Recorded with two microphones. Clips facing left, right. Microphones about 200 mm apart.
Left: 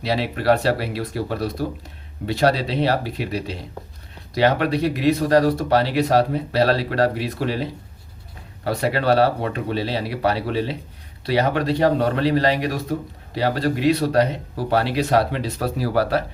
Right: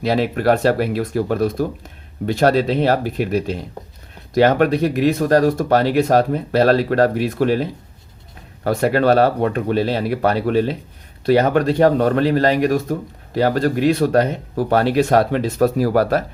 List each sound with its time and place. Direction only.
0.0 s speech: 50° right (ahead or behind)